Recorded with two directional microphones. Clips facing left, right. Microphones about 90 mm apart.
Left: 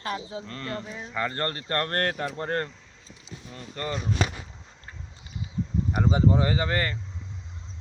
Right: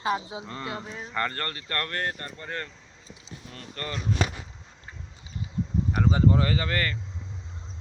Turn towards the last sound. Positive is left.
turn(degrees=20)  # may be behind; listen again after turning